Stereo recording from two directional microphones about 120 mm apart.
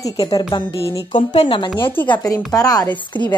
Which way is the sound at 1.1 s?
65° left (ahead or behind).